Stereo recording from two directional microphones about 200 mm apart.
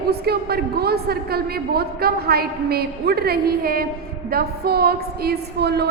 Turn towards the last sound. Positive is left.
turn(degrees=-55)  # may be behind; listen again after turning